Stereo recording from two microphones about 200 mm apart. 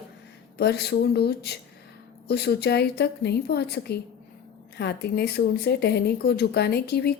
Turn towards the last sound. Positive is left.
turn(degrees=55)  # may be behind; listen again after turning